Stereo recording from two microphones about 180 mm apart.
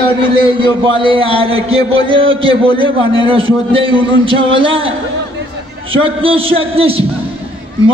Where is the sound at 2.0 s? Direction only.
30° right (ahead or behind).